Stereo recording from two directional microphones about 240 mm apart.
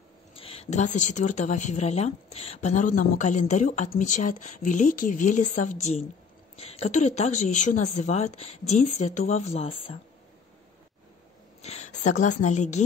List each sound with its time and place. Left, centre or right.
0.3 s a woman's voice: left
11.6 s a woman's voice: left